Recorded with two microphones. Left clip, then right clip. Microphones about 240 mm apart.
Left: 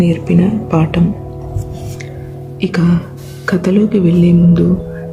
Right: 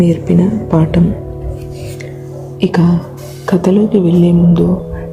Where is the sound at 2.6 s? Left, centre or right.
Centre.